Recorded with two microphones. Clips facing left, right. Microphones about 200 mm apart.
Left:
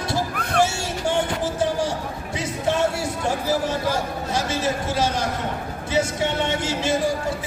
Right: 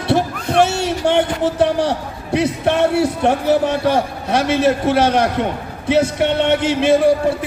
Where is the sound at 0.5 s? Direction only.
65° right (ahead or behind).